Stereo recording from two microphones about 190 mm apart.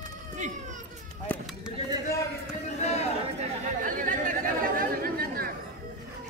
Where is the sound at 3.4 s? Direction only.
45° right (ahead or behind).